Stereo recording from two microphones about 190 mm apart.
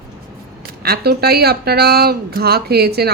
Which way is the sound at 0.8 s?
55° right (ahead or behind).